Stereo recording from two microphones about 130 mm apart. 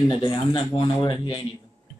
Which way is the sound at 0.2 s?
35° left (ahead or behind).